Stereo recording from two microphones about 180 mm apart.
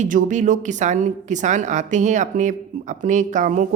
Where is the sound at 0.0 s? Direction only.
45° right (ahead or behind).